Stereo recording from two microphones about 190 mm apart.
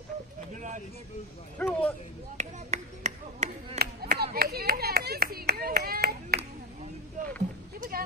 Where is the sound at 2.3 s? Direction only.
40° right (ahead or behind).